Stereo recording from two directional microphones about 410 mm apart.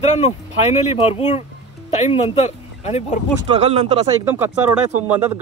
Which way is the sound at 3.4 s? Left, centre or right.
Centre.